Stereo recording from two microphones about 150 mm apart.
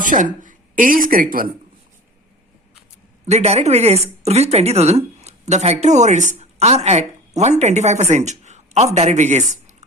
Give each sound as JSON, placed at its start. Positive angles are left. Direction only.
{"t": 0.0, "sound": "a woman's voice", "side_deg": -60}
{"t": 3.2, "sound": "speech", "side_deg": -45}